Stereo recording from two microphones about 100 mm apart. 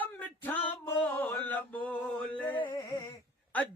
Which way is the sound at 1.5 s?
15° left (ahead or behind).